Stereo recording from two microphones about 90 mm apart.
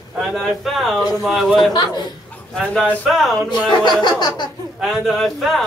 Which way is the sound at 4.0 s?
55° left (ahead or behind).